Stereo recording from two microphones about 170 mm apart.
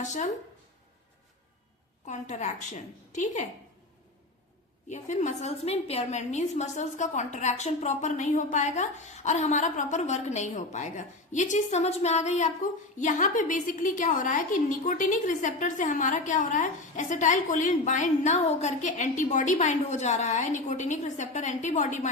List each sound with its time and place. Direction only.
0.0 s a woman's voice: 45° left (ahead or behind)
2.0 s a woman's voice: 45° left (ahead or behind)
4.9 s a woman's voice: 45° left (ahead or behind)